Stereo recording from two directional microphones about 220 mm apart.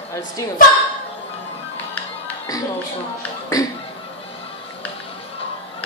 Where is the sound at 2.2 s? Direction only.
15° left (ahead or behind).